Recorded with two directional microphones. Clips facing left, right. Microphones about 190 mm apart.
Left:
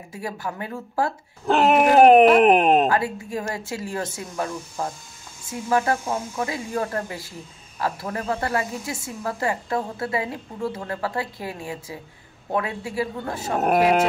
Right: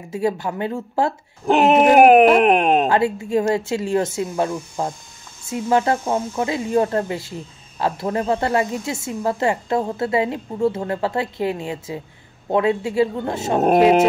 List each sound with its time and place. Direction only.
0.1 s a woman's voice: 25° right (ahead or behind)
2.0 s speech: centre (ahead or behind)
2.9 s a woman's voice: 25° right (ahead or behind)